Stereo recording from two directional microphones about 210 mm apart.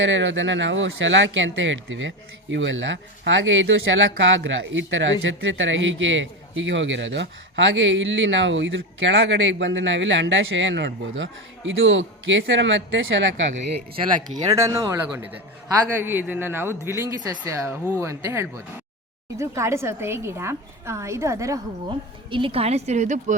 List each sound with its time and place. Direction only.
0.0 s a man's voice: 60° right (ahead or behind)
13.5 s speech: 35° right (ahead or behind)
14.5 s a woman's voice: 15° right (ahead or behind); by 23.3 s 35° right (ahead or behind)